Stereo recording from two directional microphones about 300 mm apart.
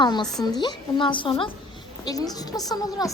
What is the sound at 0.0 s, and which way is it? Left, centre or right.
Speech, centre.